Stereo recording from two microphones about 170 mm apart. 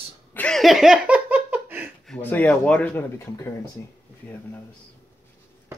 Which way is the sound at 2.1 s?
10° left (ahead or behind).